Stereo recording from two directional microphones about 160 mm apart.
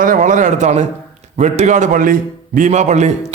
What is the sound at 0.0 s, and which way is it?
A man's voice, 55° right (ahead or behind).